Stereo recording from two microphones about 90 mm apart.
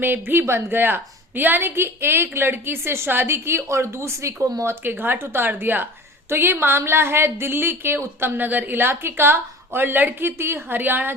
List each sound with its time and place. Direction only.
0.0 s a woman's voice: 20° right (ahead or behind)
4.7 s a woman's voice: 25° right (ahead or behind)